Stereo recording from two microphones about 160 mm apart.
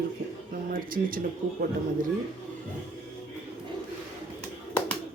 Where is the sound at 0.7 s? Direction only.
60° right (ahead or behind).